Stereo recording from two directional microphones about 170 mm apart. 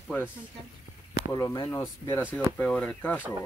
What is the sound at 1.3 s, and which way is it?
Speech, 20° left (ahead or behind).